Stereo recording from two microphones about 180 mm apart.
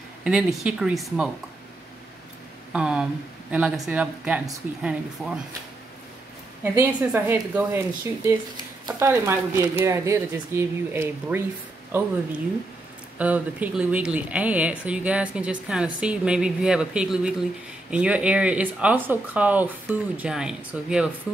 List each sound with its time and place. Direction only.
0.2 s speech: 5° right (ahead or behind)
2.7 s speech: 5° right (ahead or behind)
6.6 s speech: 10° right (ahead or behind)
13.2 s speech: 10° right (ahead or behind)